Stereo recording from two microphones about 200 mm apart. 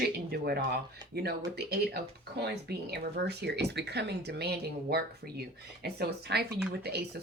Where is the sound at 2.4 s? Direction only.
55° right (ahead or behind).